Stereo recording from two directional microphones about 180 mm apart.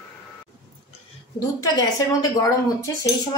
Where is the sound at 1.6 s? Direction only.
20° left (ahead or behind).